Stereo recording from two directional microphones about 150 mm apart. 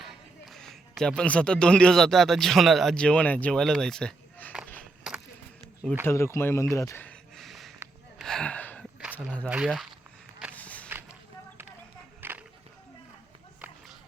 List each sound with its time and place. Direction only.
0.0 s a man's voice: centre (ahead or behind)
5.8 s speech: 10° right (ahead or behind)
6.1 s speech: 20° left (ahead or behind)
6.7 s a sound: 20° left (ahead or behind); by 7.7 s centre (ahead or behind)
8.2 s gasp: 5° left (ahead or behind)
10.5 s music: 10° left (ahead or behind)
12.2 s a sound: 15° right (ahead or behind)